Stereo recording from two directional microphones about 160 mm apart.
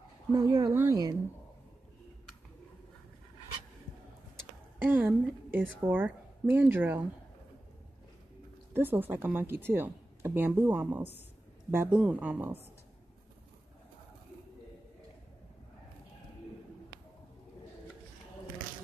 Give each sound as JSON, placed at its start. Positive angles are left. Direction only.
{"t": 0.3, "sound": "speech", "side_deg": -25}
{"t": 4.8, "sound": "a woman's voice", "side_deg": -10}
{"t": 8.7, "sound": "a woman's voice", "side_deg": -15}